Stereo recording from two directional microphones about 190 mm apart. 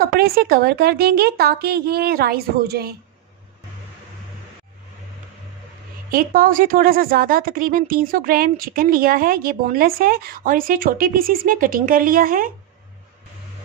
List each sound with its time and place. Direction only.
0.2 s a woman's voice: 50° right (ahead or behind)
6.0 s a woman's voice: 50° right (ahead or behind)